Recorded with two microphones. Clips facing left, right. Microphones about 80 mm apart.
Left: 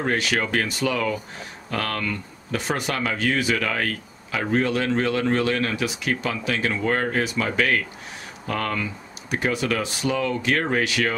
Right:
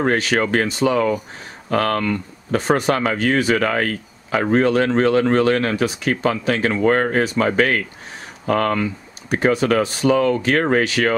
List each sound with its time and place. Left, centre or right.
0.0 s speech: right
1.7 s speech: right